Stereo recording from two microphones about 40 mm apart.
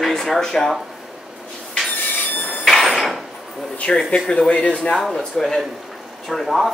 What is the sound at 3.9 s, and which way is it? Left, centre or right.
Speech, left.